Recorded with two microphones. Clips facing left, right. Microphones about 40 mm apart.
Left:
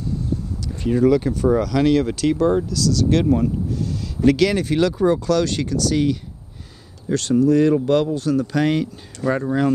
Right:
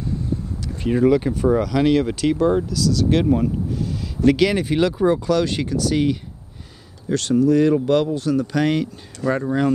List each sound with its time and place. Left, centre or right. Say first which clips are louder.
0.7 s speech: even; right
7.1 s speech: even; centre